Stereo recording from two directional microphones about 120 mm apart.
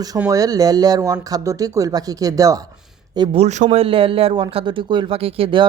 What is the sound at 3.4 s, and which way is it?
Speech, 75° right (ahead or behind).